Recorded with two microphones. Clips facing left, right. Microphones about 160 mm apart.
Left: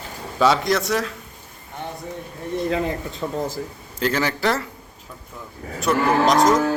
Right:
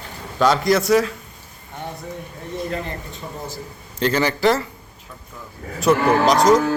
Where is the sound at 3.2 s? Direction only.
85° left.